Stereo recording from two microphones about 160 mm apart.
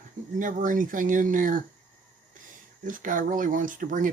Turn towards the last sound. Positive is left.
turn(degrees=-55)  # may be behind; listen again after turning